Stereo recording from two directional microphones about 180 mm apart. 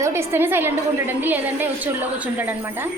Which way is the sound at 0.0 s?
15° right (ahead or behind).